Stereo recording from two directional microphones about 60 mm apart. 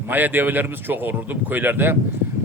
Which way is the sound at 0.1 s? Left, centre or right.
Right.